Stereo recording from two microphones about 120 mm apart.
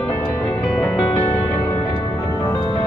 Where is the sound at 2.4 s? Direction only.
35° left (ahead or behind).